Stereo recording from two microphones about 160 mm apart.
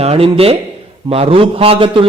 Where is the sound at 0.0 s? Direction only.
40° right (ahead or behind).